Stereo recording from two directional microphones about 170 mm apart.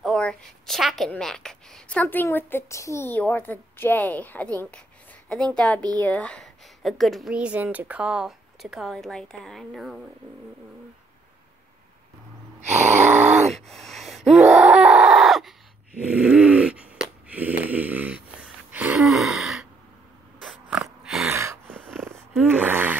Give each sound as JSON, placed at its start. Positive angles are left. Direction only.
{"t": 0.0, "sound": "a woman's voice", "side_deg": 5}
{"t": 13.1, "sound": "a sound", "side_deg": -10}
{"t": 13.5, "sound": "a sound", "side_deg": 0}
{"t": 20.7, "sound": "snort", "side_deg": -5}
{"t": 21.3, "sound": "gasp", "side_deg": -15}
{"t": 21.7, "sound": "dog", "side_deg": 5}
{"t": 22.5, "sound": "gasp", "side_deg": -10}